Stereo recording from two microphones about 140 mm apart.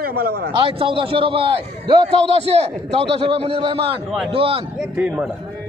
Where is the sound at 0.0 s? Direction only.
90° right.